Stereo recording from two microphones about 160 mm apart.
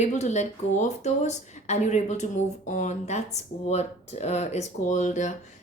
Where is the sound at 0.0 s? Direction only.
45° left (ahead or behind).